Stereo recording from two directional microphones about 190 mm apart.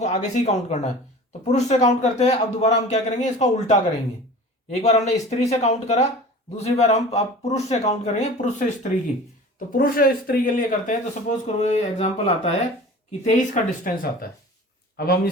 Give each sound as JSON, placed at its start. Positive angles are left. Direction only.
{"t": 0.0, "sound": "a man's voice", "side_deg": 35}
{"t": 9.7, "sound": "a man's voice", "side_deg": 50}